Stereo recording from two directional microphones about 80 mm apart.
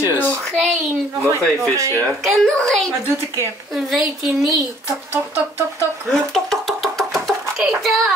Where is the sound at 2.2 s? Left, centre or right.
Centre.